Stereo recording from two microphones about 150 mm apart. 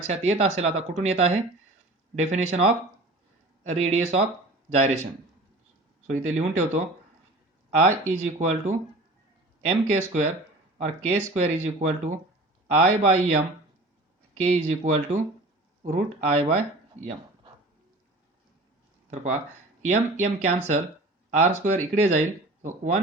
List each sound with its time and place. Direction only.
0.1 s speech: 45° right (ahead or behind)
6.2 s speech: 50° right (ahead or behind)
16.9 s speech: 55° right (ahead or behind)
19.1 s speech: 50° right (ahead or behind)